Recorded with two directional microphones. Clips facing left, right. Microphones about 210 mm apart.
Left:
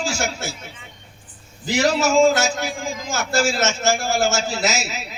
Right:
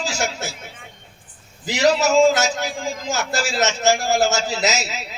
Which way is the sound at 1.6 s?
20° right (ahead or behind).